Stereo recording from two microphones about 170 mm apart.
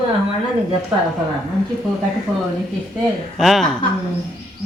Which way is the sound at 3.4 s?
Centre (ahead or behind).